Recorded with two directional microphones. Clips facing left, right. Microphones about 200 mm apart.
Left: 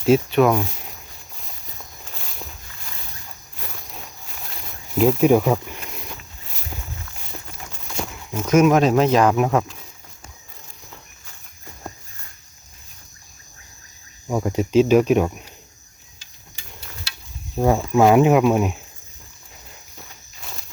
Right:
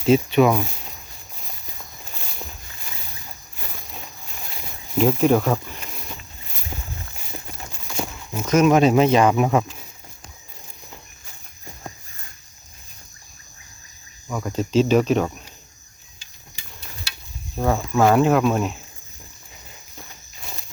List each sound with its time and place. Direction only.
0.0 s speech: centre (ahead or behind)
2.1 s walk: centre (ahead or behind)
3.6 s a sound: centre (ahead or behind)
4.9 s speech: centre (ahead or behind)
7.4 s a sound: 5° right (ahead or behind)
8.4 s speech: 5° left (ahead or behind)
14.3 s speech: 25° left (ahead or behind)
14.6 s speech: 10° left (ahead or behind)
17.6 s speech: 15° left (ahead or behind)
20.4 s walk: centre (ahead or behind)